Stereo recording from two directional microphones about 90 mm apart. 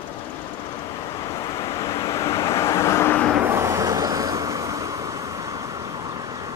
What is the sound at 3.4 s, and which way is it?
Vehicle, 30° right (ahead or behind).